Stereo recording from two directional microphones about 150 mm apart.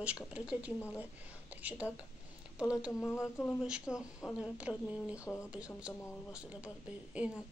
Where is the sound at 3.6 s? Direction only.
5° right (ahead or behind).